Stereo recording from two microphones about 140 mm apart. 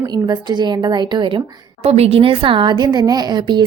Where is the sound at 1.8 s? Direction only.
50° right (ahead or behind); by 3.6 s 30° right (ahead or behind).